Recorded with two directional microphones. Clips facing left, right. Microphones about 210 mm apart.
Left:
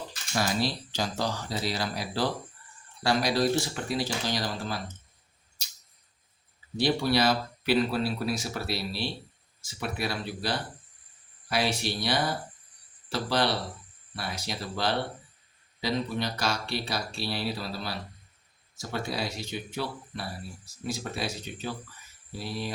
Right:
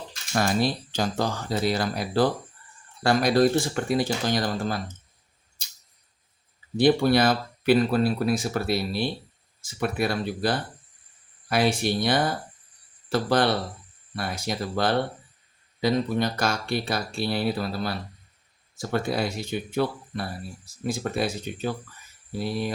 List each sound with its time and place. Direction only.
0.3 s speech: 50° right (ahead or behind)
6.7 s speech: 55° right (ahead or behind)